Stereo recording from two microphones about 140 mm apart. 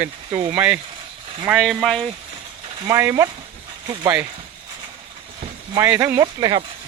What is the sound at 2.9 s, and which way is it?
Speech, 20° right (ahead or behind).